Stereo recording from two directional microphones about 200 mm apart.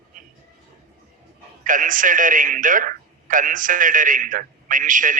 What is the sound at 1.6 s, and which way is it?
A man's voice, 40° right (ahead or behind).